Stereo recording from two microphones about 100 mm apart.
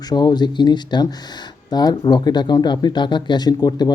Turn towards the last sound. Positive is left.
turn(degrees=45)  # may be behind; listen again after turning